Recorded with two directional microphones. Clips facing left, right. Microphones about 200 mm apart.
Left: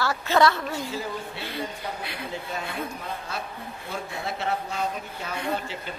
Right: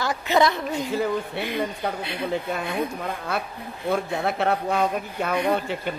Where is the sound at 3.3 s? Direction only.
60° right (ahead or behind).